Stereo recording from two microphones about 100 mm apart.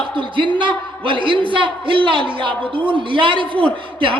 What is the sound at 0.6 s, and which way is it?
A man's voice, 55° right (ahead or behind).